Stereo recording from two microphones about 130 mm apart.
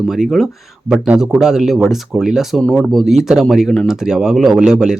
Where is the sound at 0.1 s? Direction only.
Centre (ahead or behind).